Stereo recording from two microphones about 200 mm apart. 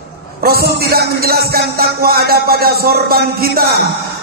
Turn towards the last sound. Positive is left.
turn(degrees=-50)  # may be behind; listen again after turning